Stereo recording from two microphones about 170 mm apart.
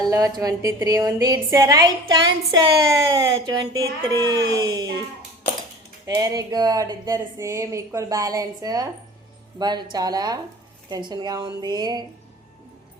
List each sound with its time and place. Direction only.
0.1 s speech: 20° right (ahead or behind)
6.1 s speech: 20° right (ahead or behind)